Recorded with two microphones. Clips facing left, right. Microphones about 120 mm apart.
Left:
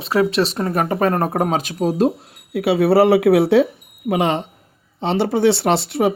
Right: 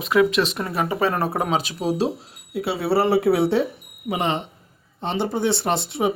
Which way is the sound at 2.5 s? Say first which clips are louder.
Left 7 dB; 60° left (ahead or behind).